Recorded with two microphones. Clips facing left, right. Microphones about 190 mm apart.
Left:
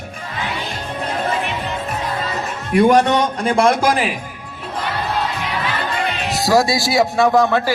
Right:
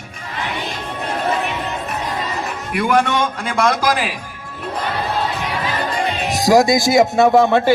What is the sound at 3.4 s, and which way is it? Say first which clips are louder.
Speech: left 4 dB; 30° left (ahead or behind).